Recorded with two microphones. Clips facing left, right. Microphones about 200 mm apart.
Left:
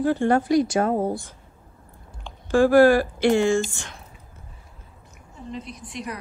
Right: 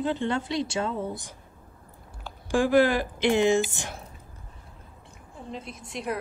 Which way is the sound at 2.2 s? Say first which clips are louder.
Left 6 dB; 15° right (ahead or behind).